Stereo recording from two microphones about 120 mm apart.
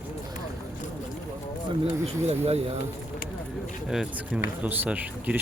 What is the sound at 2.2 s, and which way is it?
Speech, 60° right (ahead or behind).